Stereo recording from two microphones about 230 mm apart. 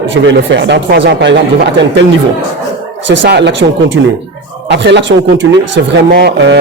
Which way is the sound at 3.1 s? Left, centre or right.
Right.